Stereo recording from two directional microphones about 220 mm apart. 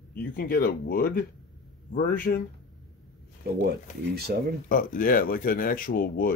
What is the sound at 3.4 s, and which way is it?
Speech, 45° right (ahead or behind).